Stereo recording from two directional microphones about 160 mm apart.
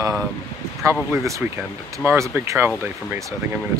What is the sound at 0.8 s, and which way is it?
Speech, 15° right (ahead or behind).